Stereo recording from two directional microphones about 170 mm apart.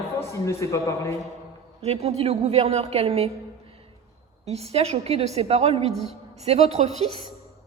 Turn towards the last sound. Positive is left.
turn(degrees=-40)  # may be behind; listen again after turning